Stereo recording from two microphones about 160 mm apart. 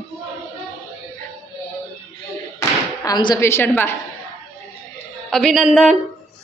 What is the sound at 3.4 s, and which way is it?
Speech, 15° left (ahead or behind).